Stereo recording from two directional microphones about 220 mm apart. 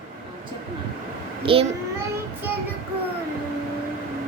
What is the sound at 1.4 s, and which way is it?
Speech, 25° right (ahead or behind).